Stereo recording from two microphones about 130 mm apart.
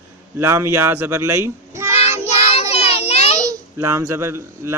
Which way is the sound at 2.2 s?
55° left (ahead or behind).